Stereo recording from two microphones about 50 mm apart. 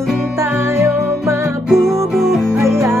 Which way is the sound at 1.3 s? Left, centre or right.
Right.